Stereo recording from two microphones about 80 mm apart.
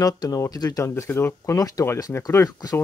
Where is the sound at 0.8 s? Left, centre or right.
Left.